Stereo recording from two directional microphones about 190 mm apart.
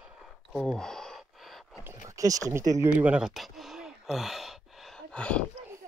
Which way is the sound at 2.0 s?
15° right (ahead or behind).